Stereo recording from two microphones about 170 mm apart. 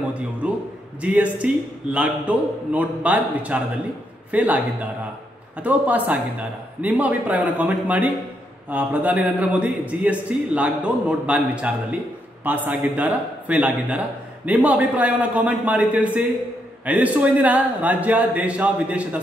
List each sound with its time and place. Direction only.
0.4 s a man's voice: 5° right (ahead or behind)